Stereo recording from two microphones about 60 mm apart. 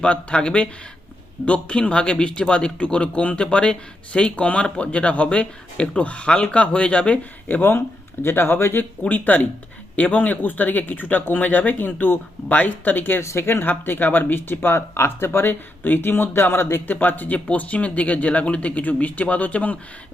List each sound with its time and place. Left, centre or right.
0.0 s speech: centre
7.4 s speech: left
13.2 s speech: left